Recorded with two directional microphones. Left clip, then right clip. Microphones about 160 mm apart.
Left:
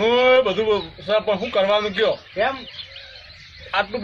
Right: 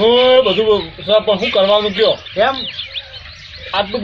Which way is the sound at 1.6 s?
20° right (ahead or behind).